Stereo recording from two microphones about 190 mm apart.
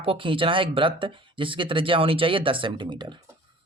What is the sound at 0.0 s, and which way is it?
Speech, 30° right (ahead or behind).